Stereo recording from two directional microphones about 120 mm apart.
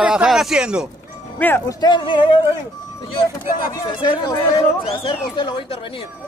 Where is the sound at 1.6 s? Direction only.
35° left (ahead or behind).